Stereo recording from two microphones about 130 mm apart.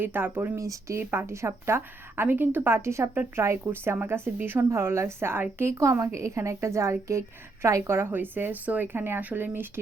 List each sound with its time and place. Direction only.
0.0 s speech: 15° right (ahead or behind)